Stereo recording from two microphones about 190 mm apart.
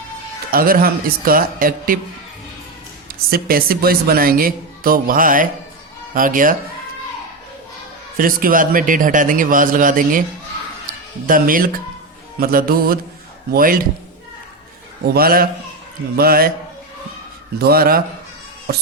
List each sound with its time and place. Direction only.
0.5 s speech: 50° right (ahead or behind)
3.1 s speech: 50° right (ahead or behind)
8.2 s speech: 50° right (ahead or behind)
15.0 s speech: 50° right (ahead or behind)
17.6 s speech: 55° right (ahead or behind)